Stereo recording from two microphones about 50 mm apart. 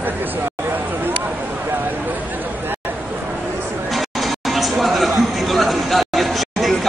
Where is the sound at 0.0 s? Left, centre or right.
Right.